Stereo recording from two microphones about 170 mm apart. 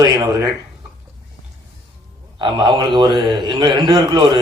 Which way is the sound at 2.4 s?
25° right (ahead or behind).